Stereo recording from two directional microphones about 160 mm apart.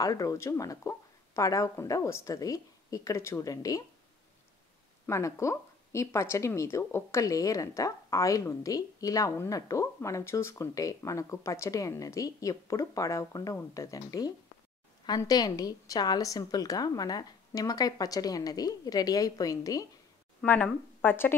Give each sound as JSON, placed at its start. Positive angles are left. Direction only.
{"t": 0.0, "sound": "speech", "side_deg": 20}
{"t": 5.0, "sound": "speech", "side_deg": 20}
{"t": 20.4, "sound": "speech", "side_deg": 10}